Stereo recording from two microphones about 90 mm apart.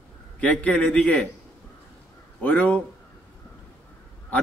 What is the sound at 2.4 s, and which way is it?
Speech, 15° left (ahead or behind).